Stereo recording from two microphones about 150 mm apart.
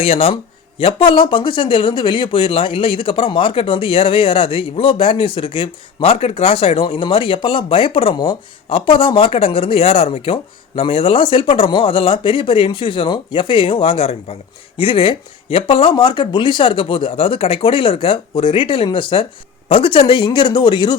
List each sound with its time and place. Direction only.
0.0 s speech: 40° left (ahead or behind)